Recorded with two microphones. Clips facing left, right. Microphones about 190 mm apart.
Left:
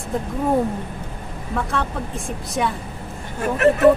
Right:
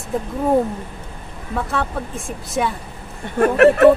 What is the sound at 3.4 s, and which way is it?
Speech, 65° right (ahead or behind).